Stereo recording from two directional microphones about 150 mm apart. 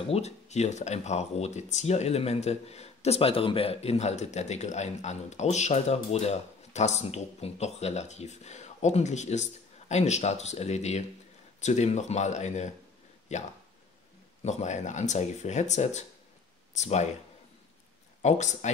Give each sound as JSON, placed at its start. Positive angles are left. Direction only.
{"t": 0.1, "sound": "speech", "side_deg": 50}
{"t": 18.2, "sound": "speech", "side_deg": 50}